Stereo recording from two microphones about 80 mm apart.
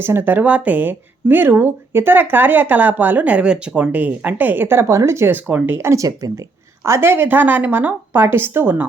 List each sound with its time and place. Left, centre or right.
0.0 s speech: right
5.7 s speech: right
6.1 s speech: right
6.8 s speech: right